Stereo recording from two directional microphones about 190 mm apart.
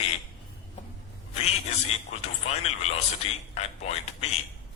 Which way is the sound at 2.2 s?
35° left (ahead or behind).